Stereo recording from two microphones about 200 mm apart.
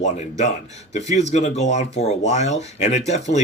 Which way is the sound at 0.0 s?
35° left (ahead or behind).